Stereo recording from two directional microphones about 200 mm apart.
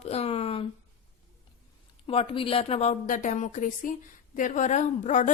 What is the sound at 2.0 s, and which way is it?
A woman's voice, 30° left (ahead or behind).